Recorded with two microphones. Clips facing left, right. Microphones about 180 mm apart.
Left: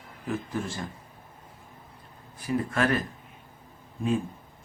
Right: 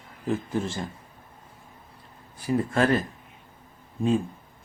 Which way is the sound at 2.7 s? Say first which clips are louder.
Right 4 dB; 30° right (ahead or behind).